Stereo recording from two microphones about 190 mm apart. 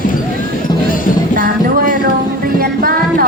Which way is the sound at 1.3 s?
45° right (ahead or behind).